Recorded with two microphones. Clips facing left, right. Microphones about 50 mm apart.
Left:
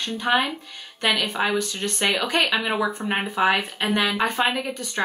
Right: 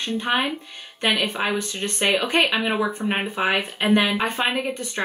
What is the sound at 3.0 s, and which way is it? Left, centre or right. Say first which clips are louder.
Speech: left 2 dB; centre.